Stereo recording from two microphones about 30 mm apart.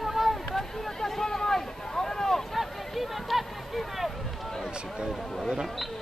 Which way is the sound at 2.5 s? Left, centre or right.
Centre.